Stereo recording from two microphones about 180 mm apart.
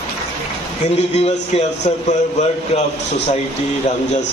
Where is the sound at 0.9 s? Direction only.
35° left (ahead or behind).